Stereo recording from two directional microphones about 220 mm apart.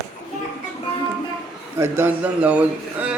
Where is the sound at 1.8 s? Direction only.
10° right (ahead or behind).